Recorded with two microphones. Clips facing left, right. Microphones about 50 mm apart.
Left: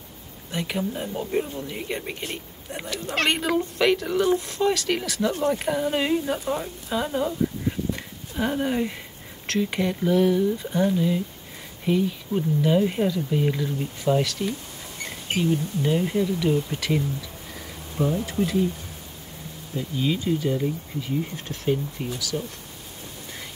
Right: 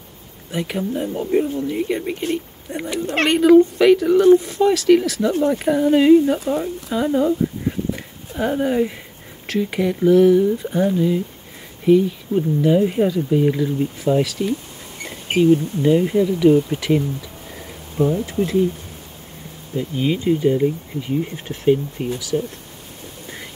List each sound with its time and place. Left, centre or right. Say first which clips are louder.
0.5 s speech: right 4 dB; centre
15.2 s speech: right 9 dB; right
15.8 s speech: right 7 dB; centre
18.2 s speech: right 4 dB; right
19.8 s speech: right 5 dB; right